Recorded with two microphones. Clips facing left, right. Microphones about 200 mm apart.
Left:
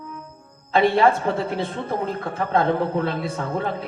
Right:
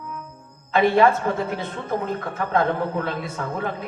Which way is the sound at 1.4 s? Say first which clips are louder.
Left 2 dB; 30° left (ahead or behind).